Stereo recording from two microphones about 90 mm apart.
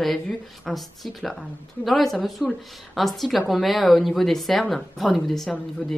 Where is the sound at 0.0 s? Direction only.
Centre (ahead or behind).